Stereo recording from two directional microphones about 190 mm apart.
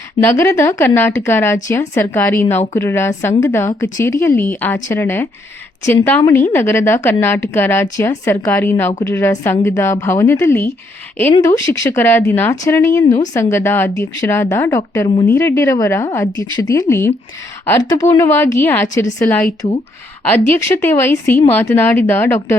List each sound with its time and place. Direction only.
0.2 s a woman's voice: 15° left (ahead or behind)
8.9 s speech: 25° left (ahead or behind)
9.1 s a woman's voice: 15° left (ahead or behind)